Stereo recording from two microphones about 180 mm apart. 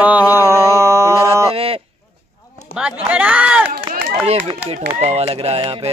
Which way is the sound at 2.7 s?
5° right (ahead or behind).